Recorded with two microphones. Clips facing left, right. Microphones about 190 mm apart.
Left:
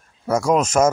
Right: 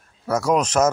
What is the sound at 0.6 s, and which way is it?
Speech, 10° left (ahead or behind).